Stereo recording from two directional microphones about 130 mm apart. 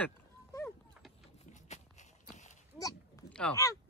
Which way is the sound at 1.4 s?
65° left (ahead or behind).